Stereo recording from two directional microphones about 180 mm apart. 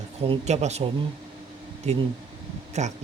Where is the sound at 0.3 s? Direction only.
40° right (ahead or behind).